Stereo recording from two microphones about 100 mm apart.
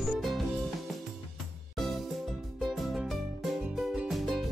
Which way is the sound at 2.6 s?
Centre (ahead or behind).